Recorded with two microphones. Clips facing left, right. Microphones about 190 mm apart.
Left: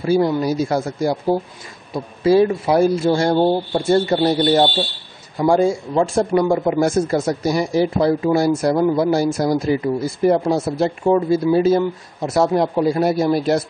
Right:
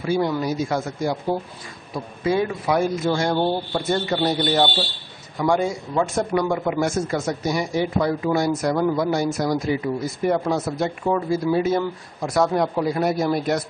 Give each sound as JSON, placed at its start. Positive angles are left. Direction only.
{"t": 0.0, "sound": "speech", "side_deg": 35}